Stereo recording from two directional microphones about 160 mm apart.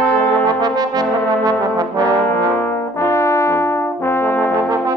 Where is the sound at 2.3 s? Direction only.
15° left (ahead or behind).